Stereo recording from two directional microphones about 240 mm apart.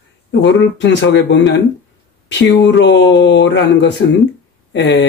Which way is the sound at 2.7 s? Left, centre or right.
Left.